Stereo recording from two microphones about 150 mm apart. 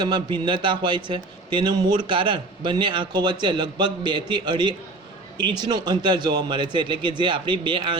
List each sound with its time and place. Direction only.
0.0 s a man's voice: 30° right (ahead or behind)